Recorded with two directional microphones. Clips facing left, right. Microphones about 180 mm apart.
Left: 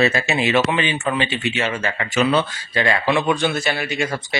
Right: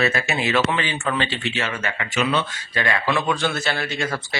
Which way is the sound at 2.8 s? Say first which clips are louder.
Left 3 dB; 25° left (ahead or behind).